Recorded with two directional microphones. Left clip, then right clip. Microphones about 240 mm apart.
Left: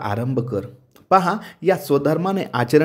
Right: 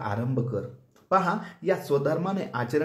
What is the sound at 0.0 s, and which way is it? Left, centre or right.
Speech, left.